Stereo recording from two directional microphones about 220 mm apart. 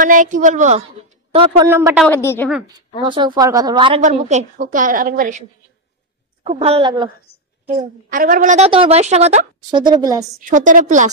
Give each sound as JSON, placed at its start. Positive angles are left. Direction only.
{"t": 0.0, "sound": "a woman's voice", "side_deg": -35}
{"t": 1.7, "sound": "speech", "side_deg": -10}
{"t": 2.0, "sound": "a woman's voice", "side_deg": 10}
{"t": 3.1, "sound": "a woman's voice", "side_deg": -20}
{"t": 6.4, "sound": "a woman's voice", "side_deg": -30}
{"t": 8.1, "sound": "a woman's voice", "side_deg": -40}
{"t": 10.4, "sound": "a woman's voice", "side_deg": -35}